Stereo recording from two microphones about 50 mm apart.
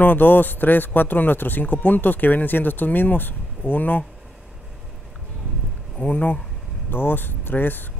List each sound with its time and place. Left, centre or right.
0.0 s speech: left
5.9 s speech: left
6.9 s speech: left